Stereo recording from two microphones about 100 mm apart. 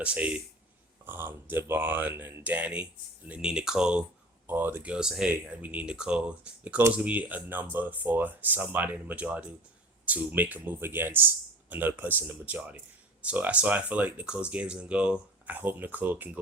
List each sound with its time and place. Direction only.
0.0 s speech: 15° right (ahead or behind)
4.4 s speech: 20° right (ahead or behind)
5.3 s speech: 20° right (ahead or behind)